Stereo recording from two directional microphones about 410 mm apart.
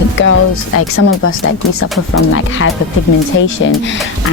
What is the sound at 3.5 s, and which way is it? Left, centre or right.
Speech, left.